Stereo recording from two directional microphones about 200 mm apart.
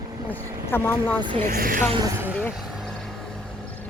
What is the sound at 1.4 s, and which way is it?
Speech, 40° right (ahead or behind).